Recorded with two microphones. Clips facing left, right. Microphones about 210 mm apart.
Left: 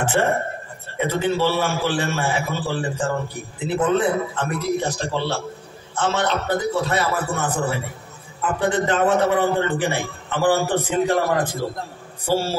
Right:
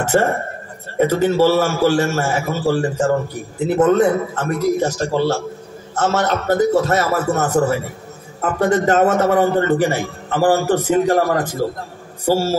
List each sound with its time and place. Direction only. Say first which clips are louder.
0.0 s a man's voice: right 3 dB; 40° right (ahead or behind)